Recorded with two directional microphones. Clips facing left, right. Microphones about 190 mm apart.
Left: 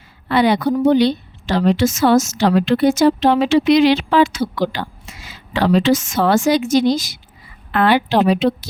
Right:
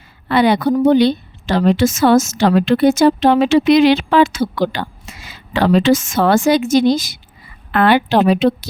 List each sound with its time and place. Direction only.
0.3 s a woman's voice: 55° right (ahead or behind)